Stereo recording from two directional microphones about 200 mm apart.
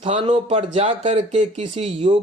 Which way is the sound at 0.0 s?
30° right (ahead or behind).